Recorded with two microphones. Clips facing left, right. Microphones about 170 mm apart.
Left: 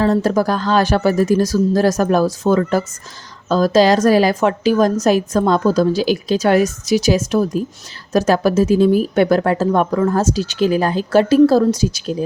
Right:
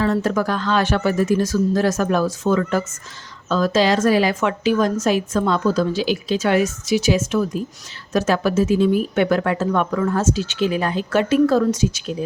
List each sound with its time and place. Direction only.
0.0 s a woman's voice: 35° left (ahead or behind)